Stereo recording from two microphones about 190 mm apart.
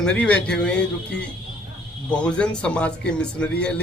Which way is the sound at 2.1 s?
5° left (ahead or behind).